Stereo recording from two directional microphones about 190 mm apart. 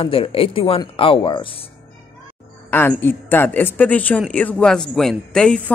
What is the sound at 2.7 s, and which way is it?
Speech, 10° left (ahead or behind).